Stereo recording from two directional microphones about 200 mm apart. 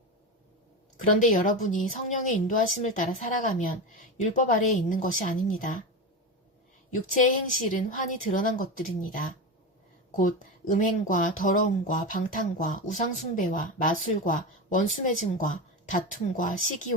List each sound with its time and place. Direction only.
1.1 s a woman's voice: 45° left (ahead or behind)
6.9 s speech: 40° left (ahead or behind)